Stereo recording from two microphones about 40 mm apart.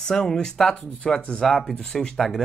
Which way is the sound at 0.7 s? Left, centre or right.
Left.